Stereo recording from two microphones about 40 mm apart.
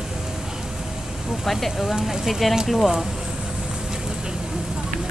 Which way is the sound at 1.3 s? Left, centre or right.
Centre.